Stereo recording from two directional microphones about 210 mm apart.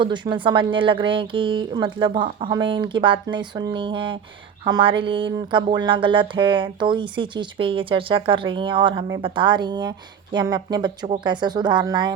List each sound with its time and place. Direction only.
0.0 s speech: 20° right (ahead or behind)